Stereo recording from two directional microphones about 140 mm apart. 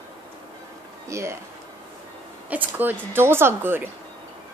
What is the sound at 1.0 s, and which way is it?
Speech, 20° right (ahead or behind).